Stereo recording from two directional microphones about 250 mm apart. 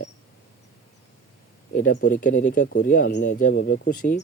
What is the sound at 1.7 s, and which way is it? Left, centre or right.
Speech, left.